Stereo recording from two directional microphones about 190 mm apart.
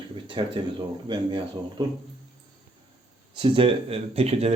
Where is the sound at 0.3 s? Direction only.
25° right (ahead or behind).